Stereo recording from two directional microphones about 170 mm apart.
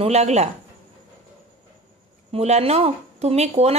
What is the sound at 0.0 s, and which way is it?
Speech, 40° right (ahead or behind).